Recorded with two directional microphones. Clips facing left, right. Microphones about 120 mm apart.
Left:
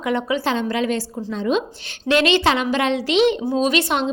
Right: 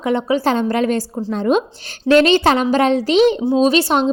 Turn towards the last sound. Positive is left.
turn(degrees=-35)  # may be behind; listen again after turning